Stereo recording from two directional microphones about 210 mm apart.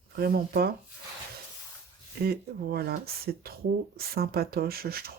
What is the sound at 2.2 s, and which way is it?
Speech, 50° right (ahead or behind).